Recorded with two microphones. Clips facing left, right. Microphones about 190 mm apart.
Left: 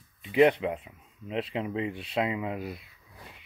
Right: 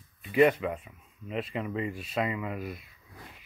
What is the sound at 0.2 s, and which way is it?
Speech, 20° left (ahead or behind).